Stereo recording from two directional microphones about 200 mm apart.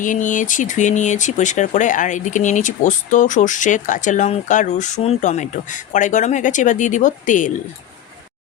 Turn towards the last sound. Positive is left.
turn(degrees=40)  # may be behind; listen again after turning